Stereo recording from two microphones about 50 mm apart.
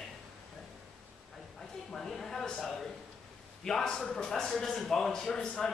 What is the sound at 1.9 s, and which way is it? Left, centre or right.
Speech, centre.